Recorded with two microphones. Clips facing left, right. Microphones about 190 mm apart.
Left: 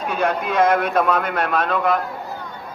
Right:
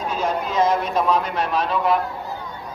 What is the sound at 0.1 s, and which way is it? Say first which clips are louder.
A man's voice: left 4 dB; 65° left (ahead or behind).